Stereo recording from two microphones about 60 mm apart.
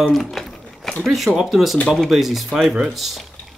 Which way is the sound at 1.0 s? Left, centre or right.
Centre.